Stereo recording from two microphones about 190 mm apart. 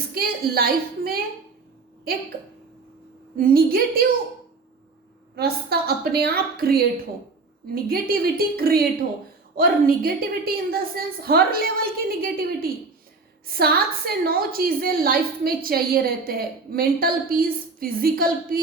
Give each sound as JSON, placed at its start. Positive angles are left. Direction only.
{"t": 0.1, "sound": "a woman's voice", "side_deg": -55}
{"t": 3.3, "sound": "a woman's voice", "side_deg": -50}
{"t": 5.4, "sound": "a woman's voice", "side_deg": -55}